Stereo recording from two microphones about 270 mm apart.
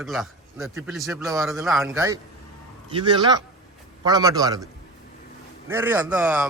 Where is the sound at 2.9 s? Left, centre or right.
Centre.